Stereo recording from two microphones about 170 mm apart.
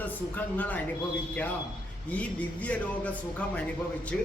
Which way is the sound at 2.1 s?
10° left (ahead or behind).